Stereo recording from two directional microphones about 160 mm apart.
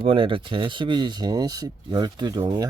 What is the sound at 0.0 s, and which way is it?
Speech, 35° right (ahead or behind).